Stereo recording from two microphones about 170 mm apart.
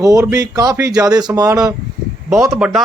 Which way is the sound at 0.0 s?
20° right (ahead or behind).